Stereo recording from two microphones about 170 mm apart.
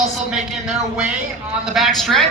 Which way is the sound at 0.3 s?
5° right (ahead or behind).